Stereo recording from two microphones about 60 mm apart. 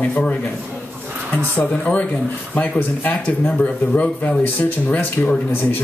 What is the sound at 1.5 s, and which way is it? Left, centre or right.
Speech, left.